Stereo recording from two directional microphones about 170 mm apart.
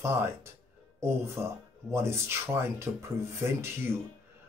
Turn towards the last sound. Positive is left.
turn(degrees=-15)  # may be behind; listen again after turning